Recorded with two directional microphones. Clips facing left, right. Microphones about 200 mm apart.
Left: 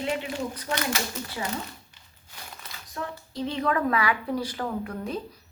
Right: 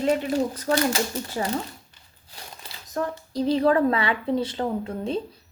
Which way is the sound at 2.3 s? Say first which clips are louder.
Right 1 dB; 30° right (ahead or behind).